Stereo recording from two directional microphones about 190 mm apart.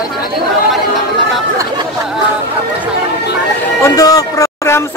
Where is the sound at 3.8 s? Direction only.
20° left (ahead or behind).